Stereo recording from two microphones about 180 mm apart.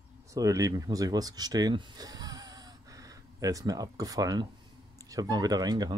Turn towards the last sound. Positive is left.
turn(degrees=-20)  # may be behind; listen again after turning